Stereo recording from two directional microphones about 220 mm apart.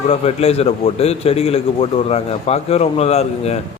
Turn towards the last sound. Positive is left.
turn(degrees=30)  # may be behind; listen again after turning